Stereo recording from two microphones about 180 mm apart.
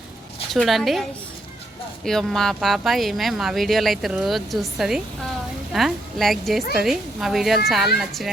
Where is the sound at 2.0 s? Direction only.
Centre (ahead or behind).